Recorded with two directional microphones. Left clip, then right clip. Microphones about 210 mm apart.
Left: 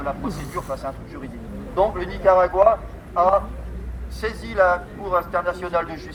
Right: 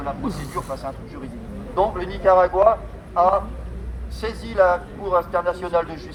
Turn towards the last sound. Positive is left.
turn(degrees=20)  # may be behind; listen again after turning